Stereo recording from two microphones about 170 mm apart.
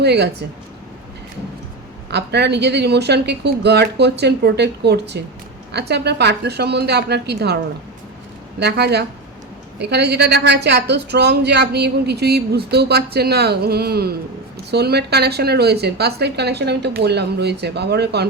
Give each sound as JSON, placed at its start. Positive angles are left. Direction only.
{"t": 0.0, "sound": "a woman's voice", "side_deg": -80}
{"t": 2.0, "sound": "a woman's voice", "side_deg": -80}